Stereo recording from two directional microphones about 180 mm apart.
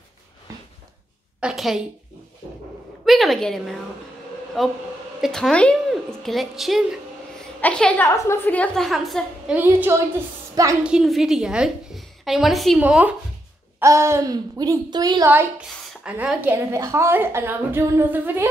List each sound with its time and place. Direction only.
1.4 s a sound: centre (ahead or behind)
3.1 s a woman's voice: centre (ahead or behind)
9.6 s a woman's voice: 10° right (ahead or behind)
10.8 s a woman's voice: 5° right (ahead or behind); by 15.2 s 20° right (ahead or behind)
15.2 s a woman's voice: 10° right (ahead or behind)